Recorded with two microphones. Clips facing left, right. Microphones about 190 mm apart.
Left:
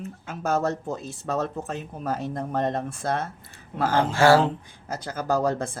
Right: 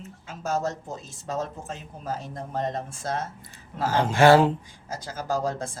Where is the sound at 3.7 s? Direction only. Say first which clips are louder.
Left 3 dB; 20° left (ahead or behind).